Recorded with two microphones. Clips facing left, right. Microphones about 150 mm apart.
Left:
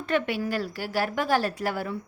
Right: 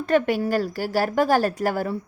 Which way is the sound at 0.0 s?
40° right (ahead or behind).